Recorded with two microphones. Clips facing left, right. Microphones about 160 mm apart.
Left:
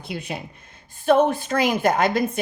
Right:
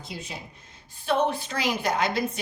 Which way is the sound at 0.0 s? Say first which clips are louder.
Left 7 dB; 60° left (ahead or behind).